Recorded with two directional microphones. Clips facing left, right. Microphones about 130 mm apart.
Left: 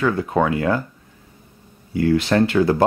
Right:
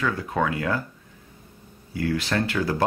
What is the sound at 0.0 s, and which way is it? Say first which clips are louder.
Speech: left 6 dB; 30° left (ahead or behind).